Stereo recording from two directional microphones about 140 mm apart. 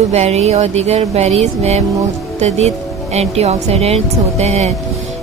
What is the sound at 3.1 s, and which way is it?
Speech, 50° right (ahead or behind).